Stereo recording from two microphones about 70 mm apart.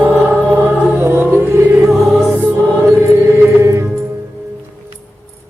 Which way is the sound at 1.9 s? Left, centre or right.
Centre.